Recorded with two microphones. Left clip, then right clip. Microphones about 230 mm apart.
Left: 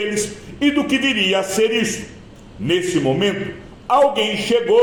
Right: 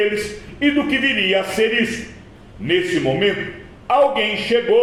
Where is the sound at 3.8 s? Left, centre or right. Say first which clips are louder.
Left 1 dB; left.